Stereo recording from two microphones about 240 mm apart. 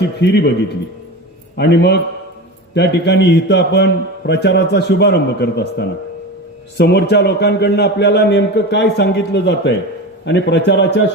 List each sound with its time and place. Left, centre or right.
0.2 s a man's voice: left
1.5 s a man's voice: left